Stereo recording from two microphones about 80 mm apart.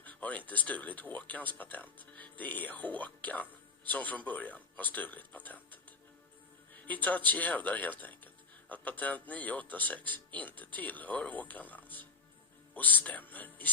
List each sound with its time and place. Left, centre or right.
0.0 s speech: centre
6.8 s speech: centre